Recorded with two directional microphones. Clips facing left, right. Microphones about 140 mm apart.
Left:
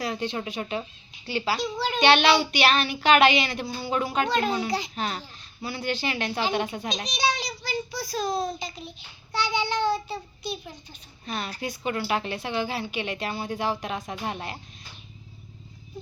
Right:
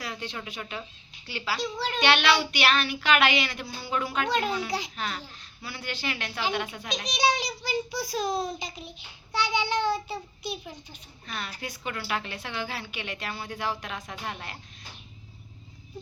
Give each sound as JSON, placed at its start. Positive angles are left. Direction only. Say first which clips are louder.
{"t": 0.0, "sound": "a woman's voice", "louder": "left 7 dB", "side_deg": 20}
{"t": 4.3, "sound": "child singing", "louder": "even", "side_deg": -10}
{"t": 4.9, "sound": "a woman's voice", "louder": "left 3 dB", "side_deg": 25}
{"t": 7.1, "sound": "a child's voice", "louder": "right 3 dB", "side_deg": -15}
{"t": 8.5, "sound": "child singing", "louder": "left 2 dB", "side_deg": -15}
{"t": 11.3, "sound": "a woman's voice", "louder": "left 5 dB", "side_deg": 25}